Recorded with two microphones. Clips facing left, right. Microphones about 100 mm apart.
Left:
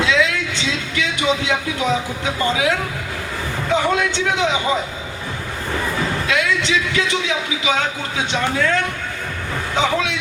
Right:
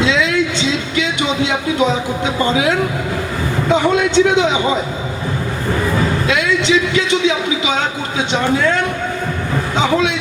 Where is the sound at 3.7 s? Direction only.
25° right (ahead or behind).